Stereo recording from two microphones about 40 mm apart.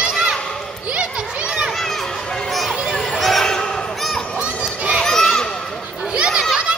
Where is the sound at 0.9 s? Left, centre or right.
Right.